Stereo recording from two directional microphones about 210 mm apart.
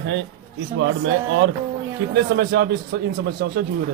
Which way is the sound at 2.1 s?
50° right (ahead or behind).